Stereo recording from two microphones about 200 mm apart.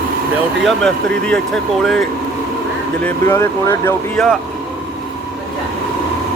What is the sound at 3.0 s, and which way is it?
Speech, 15° left (ahead or behind).